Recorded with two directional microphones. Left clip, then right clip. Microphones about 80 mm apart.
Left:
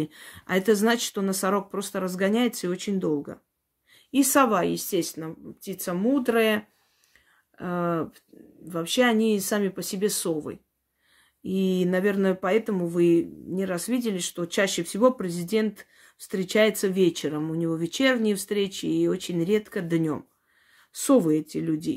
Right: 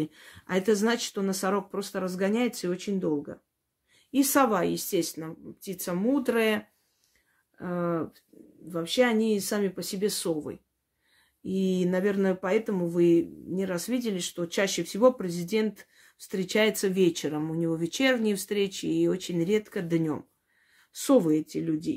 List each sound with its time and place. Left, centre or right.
0.0 s speech: left
3.9 s speech: left
7.5 s speech: left
16.7 s speech: centre
21.6 s speech: left